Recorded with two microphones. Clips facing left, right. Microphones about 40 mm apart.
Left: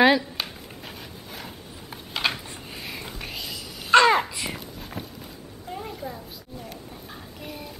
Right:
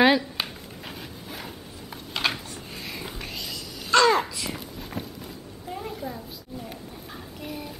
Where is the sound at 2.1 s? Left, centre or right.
Centre.